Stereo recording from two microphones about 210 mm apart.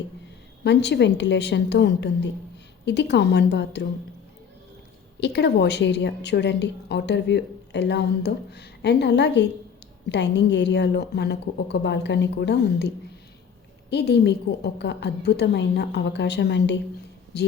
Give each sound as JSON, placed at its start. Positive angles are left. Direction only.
{"t": 0.6, "sound": "a woman's voice", "side_deg": 55}
{"t": 5.2, "sound": "a woman's voice", "side_deg": 55}
{"t": 13.9, "sound": "a woman's voice", "side_deg": 55}